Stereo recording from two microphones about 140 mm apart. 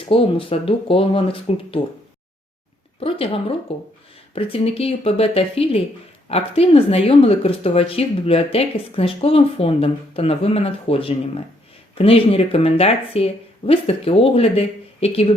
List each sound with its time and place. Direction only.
0.0 s speech: 40° left (ahead or behind)
3.0 s speech: 40° left (ahead or behind)